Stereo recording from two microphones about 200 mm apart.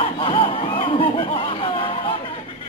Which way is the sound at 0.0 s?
25° left (ahead or behind).